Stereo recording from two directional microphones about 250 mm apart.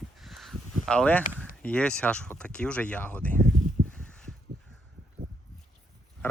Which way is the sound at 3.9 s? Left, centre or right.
Centre.